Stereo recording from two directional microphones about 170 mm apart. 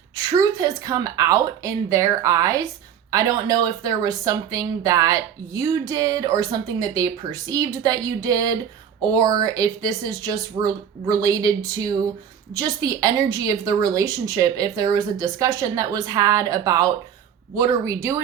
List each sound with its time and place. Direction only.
0.2 s speech: 20° right (ahead or behind)